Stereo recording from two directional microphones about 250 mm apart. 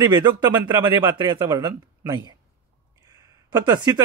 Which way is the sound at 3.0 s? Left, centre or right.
Centre.